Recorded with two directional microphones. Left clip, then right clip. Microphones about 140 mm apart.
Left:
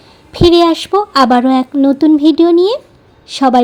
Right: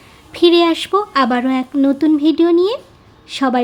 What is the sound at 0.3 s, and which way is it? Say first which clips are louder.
Speech: left 3 dB; 15° left (ahead or behind).